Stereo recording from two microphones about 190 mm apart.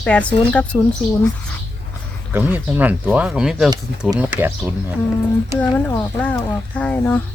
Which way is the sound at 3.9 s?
65° right (ahead or behind).